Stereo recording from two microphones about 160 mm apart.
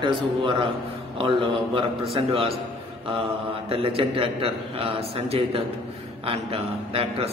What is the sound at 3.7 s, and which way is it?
A man's voice, 35° right (ahead or behind).